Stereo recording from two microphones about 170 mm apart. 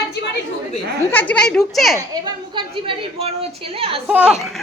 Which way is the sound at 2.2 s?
30° right (ahead or behind).